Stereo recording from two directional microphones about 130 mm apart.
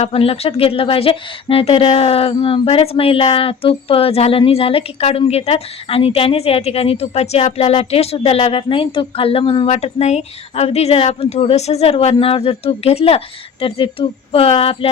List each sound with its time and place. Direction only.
0.0 s speech: 50° left (ahead or behind)
9.6 s speech: 55° left (ahead or behind)